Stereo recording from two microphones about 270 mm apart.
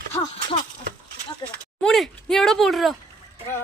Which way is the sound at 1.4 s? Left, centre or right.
Centre.